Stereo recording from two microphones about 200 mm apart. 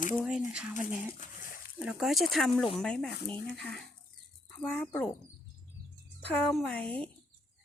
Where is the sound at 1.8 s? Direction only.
Centre (ahead or behind).